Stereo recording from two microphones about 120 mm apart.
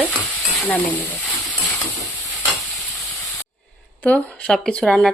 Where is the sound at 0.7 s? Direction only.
15° left (ahead or behind).